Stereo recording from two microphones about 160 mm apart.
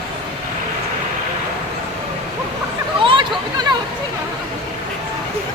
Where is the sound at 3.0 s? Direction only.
30° right (ahead or behind).